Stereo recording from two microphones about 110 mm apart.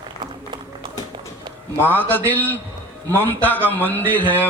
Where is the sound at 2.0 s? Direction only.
20° left (ahead or behind).